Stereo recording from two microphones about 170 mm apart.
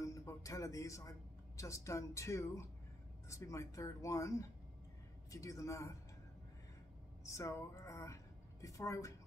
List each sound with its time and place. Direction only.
0.0 s music: 20° left (ahead or behind)
1.6 s a woman's voice: 20° left (ahead or behind)
7.2 s a woman's voice: 15° left (ahead or behind)